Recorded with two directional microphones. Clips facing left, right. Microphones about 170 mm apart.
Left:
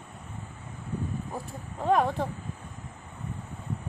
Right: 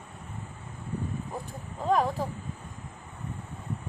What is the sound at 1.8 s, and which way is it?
Speech, centre (ahead or behind).